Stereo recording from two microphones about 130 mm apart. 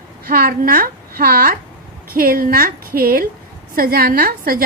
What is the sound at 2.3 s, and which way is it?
A woman's voice, 90° right.